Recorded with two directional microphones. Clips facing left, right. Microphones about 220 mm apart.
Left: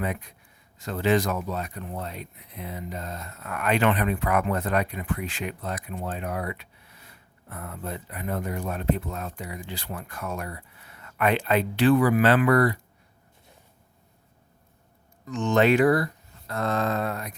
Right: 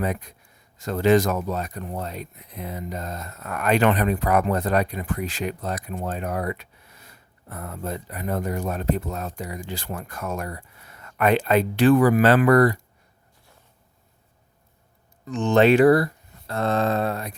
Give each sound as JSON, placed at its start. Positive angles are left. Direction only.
{"t": 0.0, "sound": "speech", "side_deg": -40}
{"t": 15.3, "sound": "speech", "side_deg": -35}